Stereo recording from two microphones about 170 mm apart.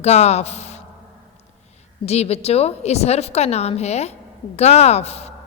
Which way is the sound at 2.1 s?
40° left (ahead or behind).